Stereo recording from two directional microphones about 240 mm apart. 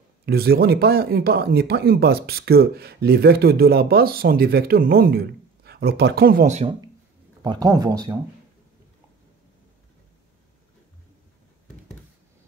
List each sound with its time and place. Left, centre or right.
0.2 s speech: right
7.4 s speech: centre